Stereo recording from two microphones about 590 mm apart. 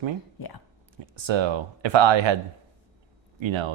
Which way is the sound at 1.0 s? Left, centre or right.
Right.